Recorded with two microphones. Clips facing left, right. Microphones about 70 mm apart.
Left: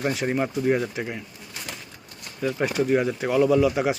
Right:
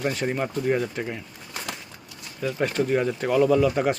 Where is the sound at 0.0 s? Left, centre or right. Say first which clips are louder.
Left 1 dB; centre.